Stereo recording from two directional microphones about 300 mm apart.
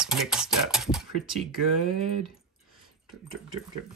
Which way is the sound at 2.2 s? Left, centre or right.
Centre.